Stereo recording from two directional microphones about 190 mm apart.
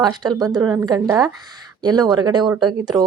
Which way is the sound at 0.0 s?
20° right (ahead or behind).